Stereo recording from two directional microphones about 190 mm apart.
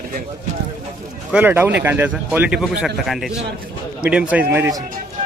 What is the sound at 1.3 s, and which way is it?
A man's voice, 10° right (ahead or behind).